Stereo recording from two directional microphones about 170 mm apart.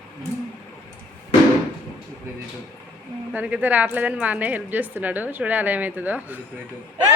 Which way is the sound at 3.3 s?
10° right (ahead or behind).